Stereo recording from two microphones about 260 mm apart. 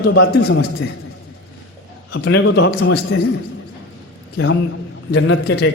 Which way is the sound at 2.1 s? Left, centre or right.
Left.